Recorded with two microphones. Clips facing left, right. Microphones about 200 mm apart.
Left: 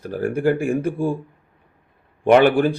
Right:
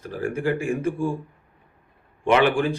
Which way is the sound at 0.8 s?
35° left (ahead or behind).